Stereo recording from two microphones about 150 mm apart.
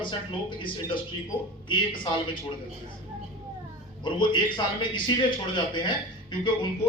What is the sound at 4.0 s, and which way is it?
A man's voice, 30° left (ahead or behind).